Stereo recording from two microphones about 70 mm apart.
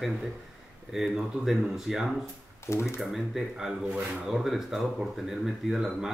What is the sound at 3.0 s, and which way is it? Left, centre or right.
Speech, centre.